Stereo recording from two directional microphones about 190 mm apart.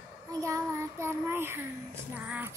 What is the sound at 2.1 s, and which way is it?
Music, 5° right (ahead or behind).